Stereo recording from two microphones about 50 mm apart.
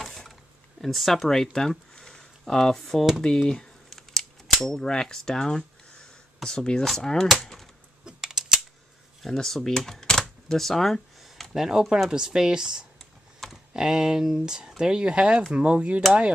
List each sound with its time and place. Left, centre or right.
0.0 s a sound: centre
0.7 s speech: centre
3.2 s cap gun: centre
7.0 s speech: centre
8.0 s mechanisms: centre
9.2 s a sound: centre
11.5 s speech: centre
13.4 s computer keyboard: centre
13.7 s speech: centre; by 16.0 s right